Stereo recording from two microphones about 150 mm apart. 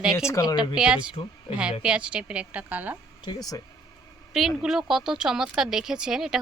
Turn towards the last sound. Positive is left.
turn(degrees=-5)  # may be behind; listen again after turning